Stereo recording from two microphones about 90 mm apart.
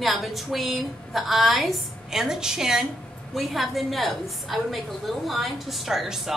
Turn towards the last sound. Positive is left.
turn(degrees=-5)  # may be behind; listen again after turning